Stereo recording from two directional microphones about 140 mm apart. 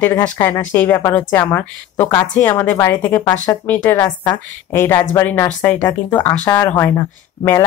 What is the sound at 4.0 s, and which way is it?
Speech, 30° left (ahead or behind).